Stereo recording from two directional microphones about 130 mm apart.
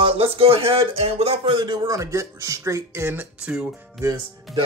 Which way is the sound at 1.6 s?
30° right (ahead or behind).